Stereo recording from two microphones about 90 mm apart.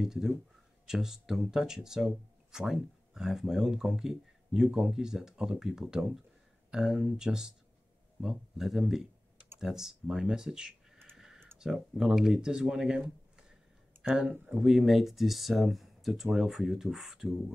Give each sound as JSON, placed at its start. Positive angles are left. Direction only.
{"t": 0.0, "sound": "speech", "side_deg": -5}
{"t": 11.1, "sound": "clicking", "side_deg": -5}
{"t": 11.5, "sound": "speech", "side_deg": -5}